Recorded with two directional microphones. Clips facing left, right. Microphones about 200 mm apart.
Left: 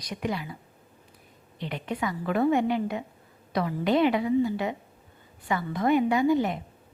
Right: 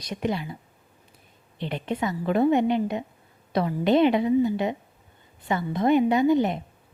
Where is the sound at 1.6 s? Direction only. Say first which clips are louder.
Right 3 dB; 25° right (ahead or behind).